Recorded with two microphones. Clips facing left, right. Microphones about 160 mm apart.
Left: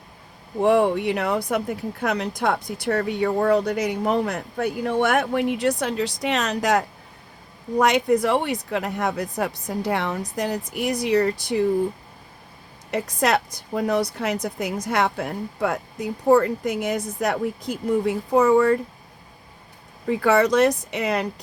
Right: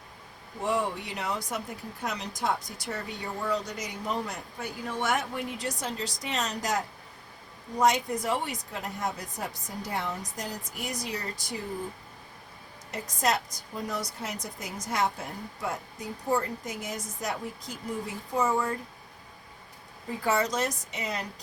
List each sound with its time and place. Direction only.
0.6 s a woman's voice: 60° left (ahead or behind)
12.9 s a woman's voice: 65° left (ahead or behind)
20.1 s speech: 70° left (ahead or behind)